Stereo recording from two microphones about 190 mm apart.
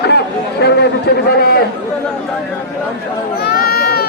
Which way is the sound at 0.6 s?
60° left (ahead or behind).